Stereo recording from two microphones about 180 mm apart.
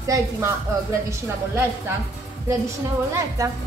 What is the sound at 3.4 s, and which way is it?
Speech, 20° right (ahead or behind).